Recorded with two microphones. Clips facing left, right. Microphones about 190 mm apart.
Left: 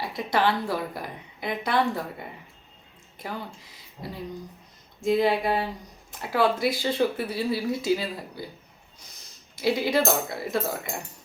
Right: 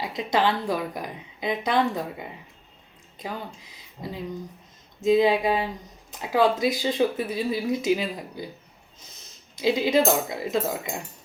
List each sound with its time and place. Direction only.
0.0 s speech: 20° right (ahead or behind)
9.6 s speech: 20° right (ahead or behind)